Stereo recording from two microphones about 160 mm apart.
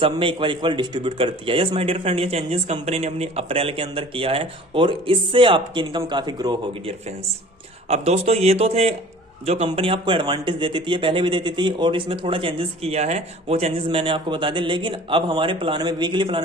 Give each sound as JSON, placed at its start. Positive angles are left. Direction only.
{"t": 0.0, "sound": "a man's voice", "side_deg": -35}
{"t": 7.9, "sound": "a man's voice", "side_deg": -40}